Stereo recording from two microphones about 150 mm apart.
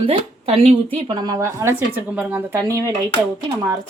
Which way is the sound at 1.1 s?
30° right (ahead or behind).